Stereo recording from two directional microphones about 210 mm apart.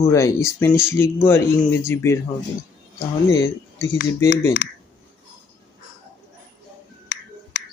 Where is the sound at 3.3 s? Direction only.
15° left (ahead or behind).